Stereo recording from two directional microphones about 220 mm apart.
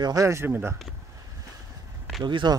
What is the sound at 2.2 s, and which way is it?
Speech, 20° right (ahead or behind).